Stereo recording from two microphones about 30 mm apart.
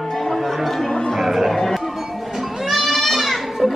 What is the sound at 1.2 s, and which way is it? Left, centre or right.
Music, centre.